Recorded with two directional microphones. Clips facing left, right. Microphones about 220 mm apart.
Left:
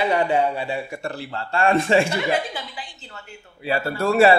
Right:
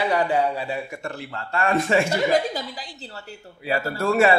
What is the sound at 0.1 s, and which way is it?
A man's voice, 25° left (ahead or behind).